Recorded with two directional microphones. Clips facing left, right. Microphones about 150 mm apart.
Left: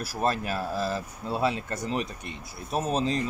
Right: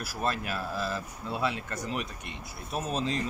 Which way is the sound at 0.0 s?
35° left (ahead or behind).